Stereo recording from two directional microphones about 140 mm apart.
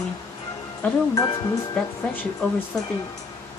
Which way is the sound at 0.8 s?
10° left (ahead or behind).